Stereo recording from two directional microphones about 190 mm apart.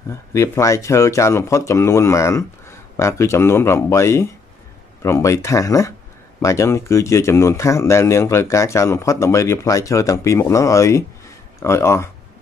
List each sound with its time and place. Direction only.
0.1 s speech: 15° left (ahead or behind)